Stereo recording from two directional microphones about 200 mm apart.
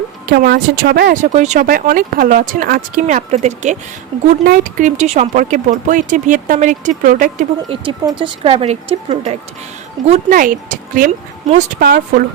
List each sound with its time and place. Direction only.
0.3 s speech: 50° right (ahead or behind)
7.7 s speech: 25° right (ahead or behind)
10.1 s speech: 40° right (ahead or behind)
11.8 s speech: 50° right (ahead or behind)